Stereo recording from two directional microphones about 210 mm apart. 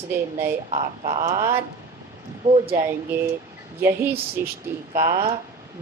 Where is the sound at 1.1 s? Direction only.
15° right (ahead or behind).